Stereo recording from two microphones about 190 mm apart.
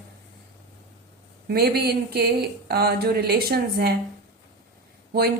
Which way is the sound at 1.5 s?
55° right (ahead or behind).